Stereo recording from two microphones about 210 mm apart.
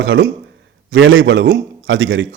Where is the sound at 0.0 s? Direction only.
60° right (ahead or behind).